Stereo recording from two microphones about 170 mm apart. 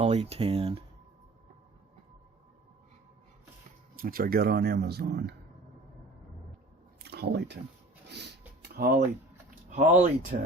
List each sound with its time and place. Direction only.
0.0 s speech: 40° right (ahead or behind)
4.0 s speech: 60° right (ahead or behind)
7.0 s speech: 75° right (ahead or behind)
8.0 s a sound: 85° right; by 9.0 s 65° right (ahead or behind)
9.6 s speech: 45° right (ahead or behind)